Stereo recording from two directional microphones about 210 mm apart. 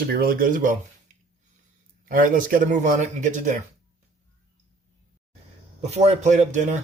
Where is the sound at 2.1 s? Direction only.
40° right (ahead or behind).